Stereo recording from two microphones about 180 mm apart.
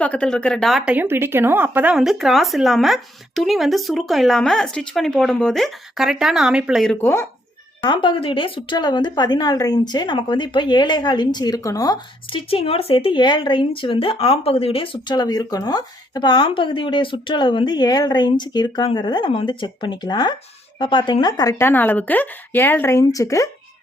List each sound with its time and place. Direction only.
0.0 s a woman's voice: 5° left (ahead or behind)
7.8 s speech: 25° left (ahead or behind)
12.5 s a woman's voice: 30° left (ahead or behind); by 23.5 s 15° left (ahead or behind)